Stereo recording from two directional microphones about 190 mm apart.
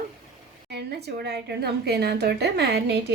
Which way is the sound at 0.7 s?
60° right (ahead or behind).